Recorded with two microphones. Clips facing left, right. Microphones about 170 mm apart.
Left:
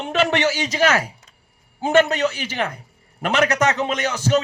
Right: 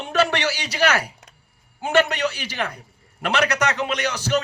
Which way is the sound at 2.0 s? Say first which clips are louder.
Left 2 dB; 50° left (ahead or behind).